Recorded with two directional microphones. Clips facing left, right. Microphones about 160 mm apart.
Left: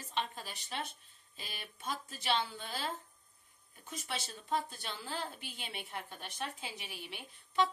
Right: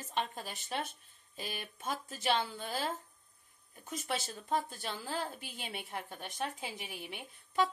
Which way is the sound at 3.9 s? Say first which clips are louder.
Right 4 dB; 50° right (ahead or behind).